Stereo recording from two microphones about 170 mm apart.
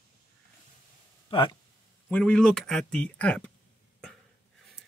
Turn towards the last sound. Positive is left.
turn(degrees=5)  # may be behind; listen again after turning